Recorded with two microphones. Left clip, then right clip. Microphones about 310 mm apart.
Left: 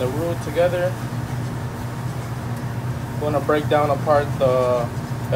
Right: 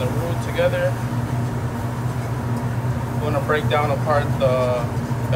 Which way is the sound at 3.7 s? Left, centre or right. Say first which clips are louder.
Left 4 dB; centre.